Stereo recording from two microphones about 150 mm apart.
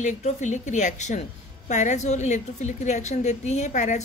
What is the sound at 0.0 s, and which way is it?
Speech, 50° left (ahead or behind).